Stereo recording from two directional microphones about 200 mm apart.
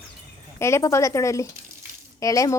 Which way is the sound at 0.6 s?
15° left (ahead or behind).